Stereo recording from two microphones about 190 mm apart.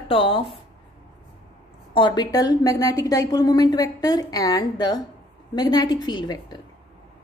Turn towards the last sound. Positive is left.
turn(degrees=20)  # may be behind; listen again after turning